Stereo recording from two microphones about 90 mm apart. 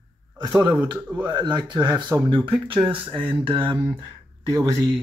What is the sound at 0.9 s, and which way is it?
Speech, 15° right (ahead or behind).